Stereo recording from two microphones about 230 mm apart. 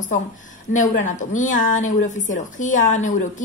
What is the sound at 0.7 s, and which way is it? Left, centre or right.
A woman's voice, left.